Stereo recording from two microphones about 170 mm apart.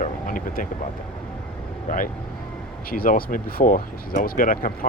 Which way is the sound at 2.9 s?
55° left (ahead or behind).